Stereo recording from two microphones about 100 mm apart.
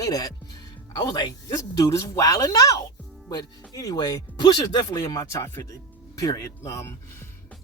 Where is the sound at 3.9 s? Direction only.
45° left (ahead or behind); by 7.3 s 30° left (ahead or behind).